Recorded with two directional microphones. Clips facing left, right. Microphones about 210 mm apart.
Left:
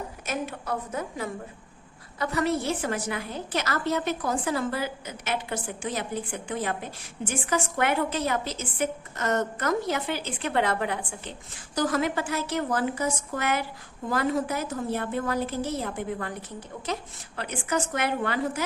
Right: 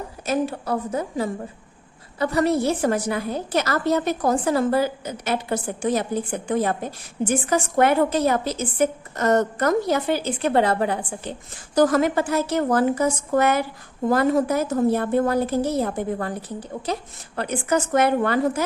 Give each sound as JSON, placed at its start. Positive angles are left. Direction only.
{"t": 0.3, "sound": "a woman's voice", "side_deg": -35}
{"t": 2.4, "sound": "a woman's voice", "side_deg": -40}